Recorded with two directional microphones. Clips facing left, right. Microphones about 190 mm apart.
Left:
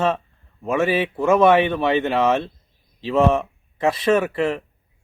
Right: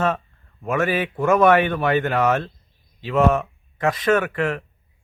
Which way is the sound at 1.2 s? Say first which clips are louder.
Left 1 dB; 25° left (ahead or behind).